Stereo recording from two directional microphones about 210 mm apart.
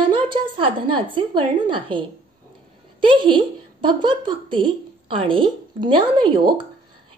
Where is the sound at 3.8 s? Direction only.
20° right (ahead or behind).